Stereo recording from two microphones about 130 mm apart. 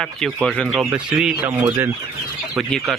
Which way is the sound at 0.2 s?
Centre (ahead or behind).